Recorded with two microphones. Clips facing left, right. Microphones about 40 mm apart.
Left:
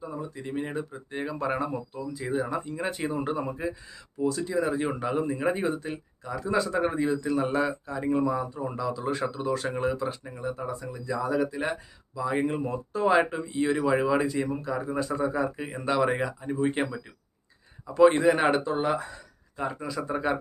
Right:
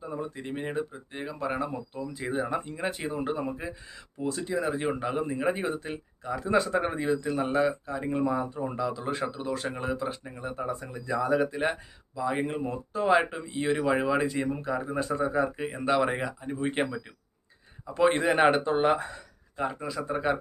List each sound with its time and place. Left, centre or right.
0.0 s speech: right
0.6 s a man's voice: centre
1.1 s speech: centre
1.9 s speech: right
2.7 s a man's voice: centre
3.9 s speech: right
4.5 s a man's voice: centre
12.1 s a man's voice: centre
16.6 s a man's voice: centre
18.6 s speech: right
19.5 s a man's voice: centre